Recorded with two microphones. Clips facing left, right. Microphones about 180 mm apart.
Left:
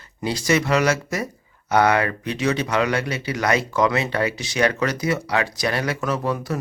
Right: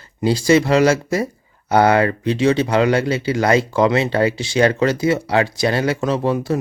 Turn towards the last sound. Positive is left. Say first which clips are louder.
# right 5 dB
turn(degrees=-30)  # may be behind; listen again after turning